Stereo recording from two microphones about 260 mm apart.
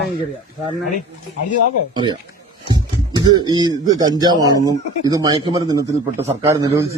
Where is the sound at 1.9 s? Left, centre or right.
Centre.